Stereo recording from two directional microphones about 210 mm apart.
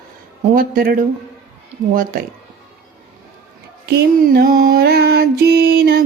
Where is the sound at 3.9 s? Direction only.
50° right (ahead or behind).